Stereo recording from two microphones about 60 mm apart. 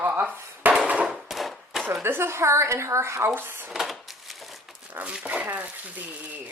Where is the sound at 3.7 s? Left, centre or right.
Centre.